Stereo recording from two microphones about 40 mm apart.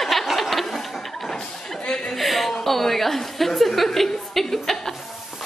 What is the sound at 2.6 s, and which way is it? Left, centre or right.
A woman's voice, centre.